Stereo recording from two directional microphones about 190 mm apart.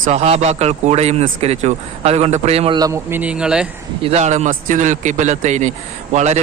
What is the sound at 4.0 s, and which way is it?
A man's voice, 35° right (ahead or behind).